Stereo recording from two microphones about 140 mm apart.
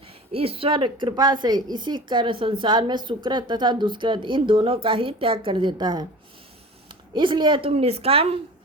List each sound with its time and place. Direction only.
0.3 s a woman's voice: 40° right (ahead or behind)
7.1 s speech: 35° right (ahead or behind)